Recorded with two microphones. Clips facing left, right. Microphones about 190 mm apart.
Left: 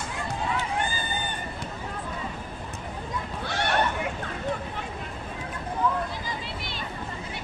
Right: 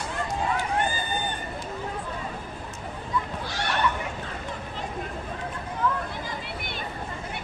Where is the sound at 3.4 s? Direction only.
60° left (ahead or behind).